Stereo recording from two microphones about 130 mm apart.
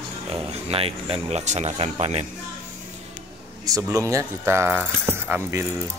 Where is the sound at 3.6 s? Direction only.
25° right (ahead or behind).